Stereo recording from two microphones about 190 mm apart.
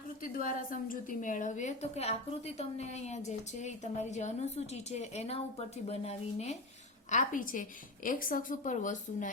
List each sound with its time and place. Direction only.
0.2 s a woman's voice: 45° left (ahead or behind)
7.1 s a woman's voice: 45° left (ahead or behind)